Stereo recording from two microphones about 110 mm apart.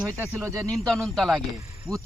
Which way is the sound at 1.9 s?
45° right (ahead or behind).